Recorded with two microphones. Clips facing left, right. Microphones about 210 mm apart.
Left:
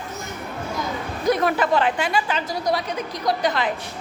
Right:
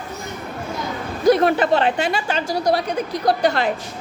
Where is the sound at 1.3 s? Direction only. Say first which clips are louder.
Right 3 dB; 30° right (ahead or behind).